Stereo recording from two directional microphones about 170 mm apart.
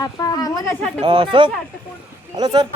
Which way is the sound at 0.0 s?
20° left (ahead or behind).